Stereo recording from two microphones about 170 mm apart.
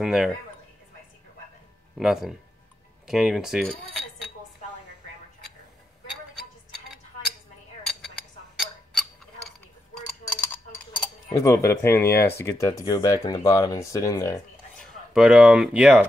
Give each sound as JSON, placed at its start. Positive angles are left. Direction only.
{"t": 0.0, "sound": "speech", "side_deg": -5}
{"t": 2.0, "sound": "speech", "side_deg": -5}
{"t": 3.1, "sound": "cutlery", "side_deg": -5}
{"t": 7.8, "sound": "chink", "side_deg": 0}
{"t": 8.5, "sound": "tick-tock", "side_deg": 0}
{"t": 10.2, "sound": "a sound", "side_deg": 10}
{"t": 11.2, "sound": "speech", "side_deg": 20}
{"t": 14.8, "sound": "speech", "side_deg": -5}